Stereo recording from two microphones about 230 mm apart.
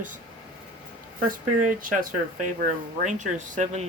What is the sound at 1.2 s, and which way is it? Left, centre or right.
Speech, right.